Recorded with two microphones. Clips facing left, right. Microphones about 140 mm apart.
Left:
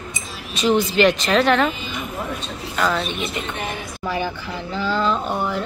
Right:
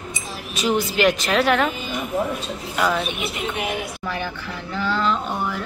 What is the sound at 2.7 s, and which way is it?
Speech, 10° right (ahead or behind).